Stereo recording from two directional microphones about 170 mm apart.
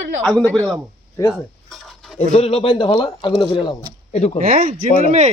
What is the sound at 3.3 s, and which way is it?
Speech, centre (ahead or behind).